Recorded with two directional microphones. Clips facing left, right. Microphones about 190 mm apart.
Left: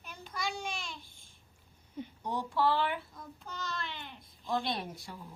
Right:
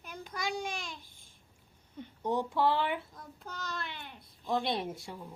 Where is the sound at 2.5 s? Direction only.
20° right (ahead or behind).